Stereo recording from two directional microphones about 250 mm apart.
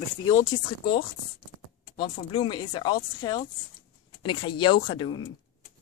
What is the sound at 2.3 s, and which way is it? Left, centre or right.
Speech, centre.